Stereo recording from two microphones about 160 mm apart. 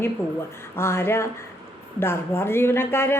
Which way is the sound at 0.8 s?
15° left (ahead or behind).